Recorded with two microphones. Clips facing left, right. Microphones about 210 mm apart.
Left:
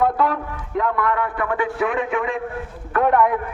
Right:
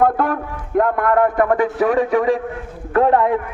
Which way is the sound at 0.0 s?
50° right (ahead or behind).